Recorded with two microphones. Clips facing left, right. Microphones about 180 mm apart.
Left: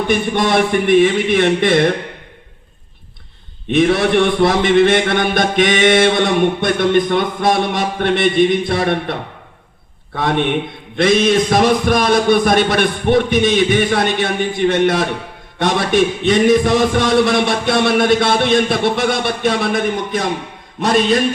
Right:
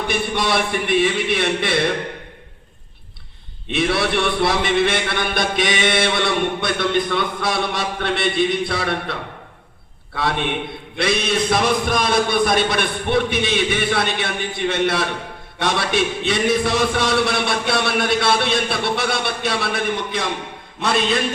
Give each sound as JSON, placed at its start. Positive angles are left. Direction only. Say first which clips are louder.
{"t": 0.1, "sound": "a man's voice", "louder": "left 6 dB", "side_deg": 45}
{"t": 3.7, "sound": "a man's voice", "louder": "left 7 dB", "side_deg": 45}
{"t": 10.2, "sound": "a man's voice", "louder": "left 5 dB", "side_deg": 50}
{"t": 20.8, "sound": "a sound", "louder": "left 6 dB", "side_deg": 40}